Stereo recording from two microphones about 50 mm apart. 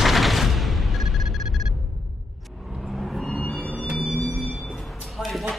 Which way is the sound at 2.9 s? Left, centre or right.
Centre.